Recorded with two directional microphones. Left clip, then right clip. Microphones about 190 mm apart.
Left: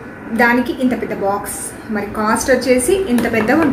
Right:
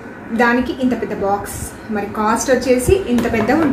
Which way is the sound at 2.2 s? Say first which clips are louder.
Left 1 dB; 10° right (ahead or behind).